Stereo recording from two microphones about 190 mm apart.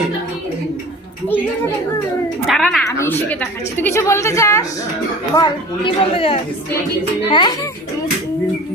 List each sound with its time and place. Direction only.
2.5 s a woman's voice: centre (ahead or behind)
5.4 s speech: 25° left (ahead or behind)